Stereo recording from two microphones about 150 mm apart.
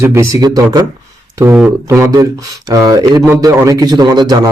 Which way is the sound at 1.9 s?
20° right (ahead or behind).